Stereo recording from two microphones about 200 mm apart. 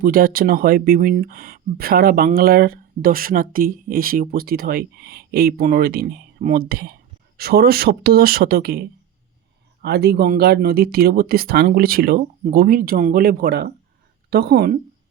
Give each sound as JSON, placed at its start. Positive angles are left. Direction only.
{"t": 0.0, "sound": "speech", "side_deg": -45}